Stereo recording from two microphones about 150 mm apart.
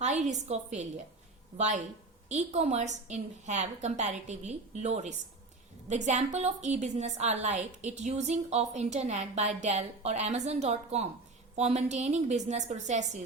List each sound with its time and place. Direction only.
0.0 s a woman's voice: 50° right (ahead or behind)